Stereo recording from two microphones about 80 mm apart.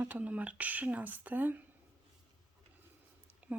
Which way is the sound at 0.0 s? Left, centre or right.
Centre.